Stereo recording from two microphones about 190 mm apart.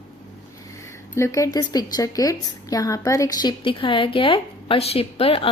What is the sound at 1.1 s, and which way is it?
A woman's voice, 15° left (ahead or behind).